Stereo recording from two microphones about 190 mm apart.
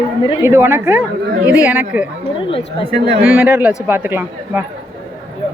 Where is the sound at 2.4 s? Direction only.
25° left (ahead or behind).